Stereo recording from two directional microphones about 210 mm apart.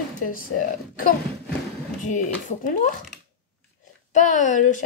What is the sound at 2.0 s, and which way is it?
Speech, 35° left (ahead or behind).